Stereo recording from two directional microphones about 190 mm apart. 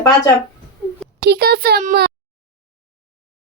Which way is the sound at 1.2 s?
55° right (ahead or behind).